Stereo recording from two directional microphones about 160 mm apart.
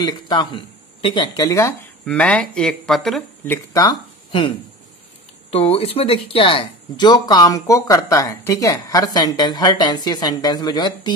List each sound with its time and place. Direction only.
0.0 s speech: 30° left (ahead or behind)
2.0 s speech: 5° left (ahead or behind)
3.4 s speech: 20° left (ahead or behind)